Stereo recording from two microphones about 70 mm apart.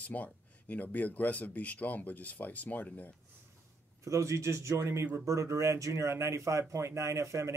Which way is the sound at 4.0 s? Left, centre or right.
Right.